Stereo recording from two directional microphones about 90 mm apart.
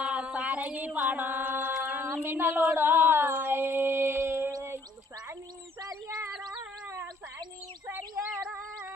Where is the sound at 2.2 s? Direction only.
20° right (ahead or behind).